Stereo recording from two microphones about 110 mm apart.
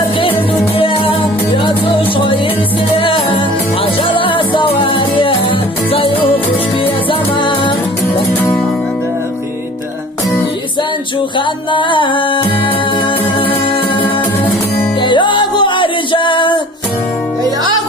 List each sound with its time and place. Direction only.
0.8 s music: 55° left (ahead or behind)
11.3 s music: 50° left (ahead or behind)
15.0 s music: 50° left (ahead or behind)